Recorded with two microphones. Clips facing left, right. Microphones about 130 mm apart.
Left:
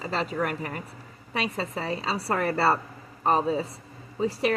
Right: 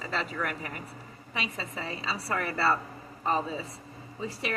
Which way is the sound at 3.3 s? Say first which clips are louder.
Left 6 dB; 60° left (ahead or behind).